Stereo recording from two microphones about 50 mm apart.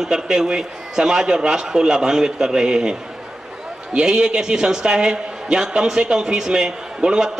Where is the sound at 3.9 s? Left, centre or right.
Centre.